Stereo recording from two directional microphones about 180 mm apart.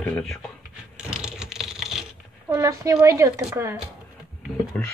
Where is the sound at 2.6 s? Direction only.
15° right (ahead or behind).